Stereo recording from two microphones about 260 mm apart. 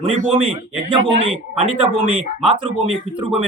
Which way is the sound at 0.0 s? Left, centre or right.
Right.